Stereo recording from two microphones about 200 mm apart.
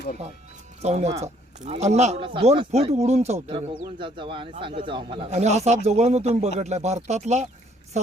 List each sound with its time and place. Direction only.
0.8 s a man's voice: 35° right (ahead or behind)